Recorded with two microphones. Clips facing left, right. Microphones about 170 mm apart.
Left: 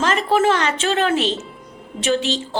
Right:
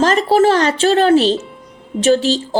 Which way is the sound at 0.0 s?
35° right (ahead or behind).